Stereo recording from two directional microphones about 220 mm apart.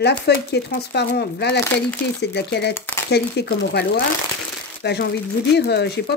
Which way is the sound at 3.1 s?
50° left (ahead or behind).